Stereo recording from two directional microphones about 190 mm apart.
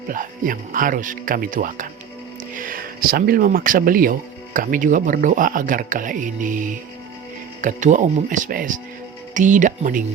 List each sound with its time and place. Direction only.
0.1 s speech: 45° right (ahead or behind)